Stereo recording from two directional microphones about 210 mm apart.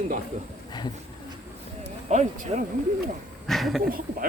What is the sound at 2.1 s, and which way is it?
Speech, 35° right (ahead or behind).